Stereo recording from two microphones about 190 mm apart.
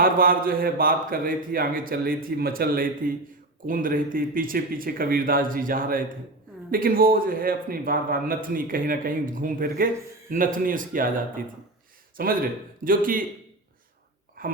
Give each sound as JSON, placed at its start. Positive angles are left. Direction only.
{"t": 0.0, "sound": "a man's voice", "side_deg": -50}
{"t": 12.1, "sound": "a man's voice", "side_deg": -50}
{"t": 14.4, "sound": "a sound", "side_deg": -50}